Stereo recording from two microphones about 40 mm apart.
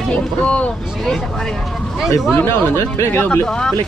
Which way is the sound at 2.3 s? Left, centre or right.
Left.